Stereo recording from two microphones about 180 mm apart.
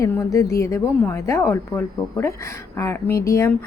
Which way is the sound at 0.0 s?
15° left (ahead or behind).